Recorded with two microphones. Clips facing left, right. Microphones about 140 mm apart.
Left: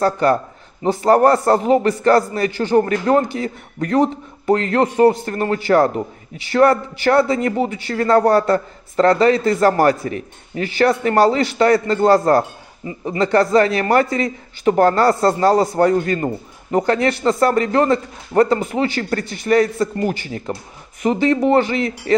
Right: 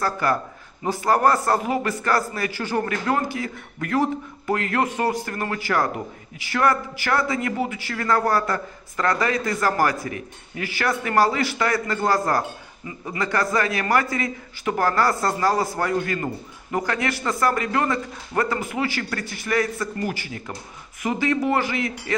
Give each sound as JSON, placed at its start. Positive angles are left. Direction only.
{"t": 0.0, "sound": "a man's voice", "side_deg": 25}